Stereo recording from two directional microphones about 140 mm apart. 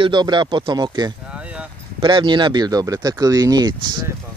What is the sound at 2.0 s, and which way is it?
Speech, 35° right (ahead or behind).